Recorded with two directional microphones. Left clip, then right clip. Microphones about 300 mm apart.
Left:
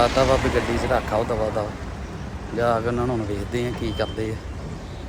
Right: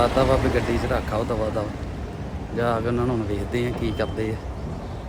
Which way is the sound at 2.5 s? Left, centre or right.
Centre.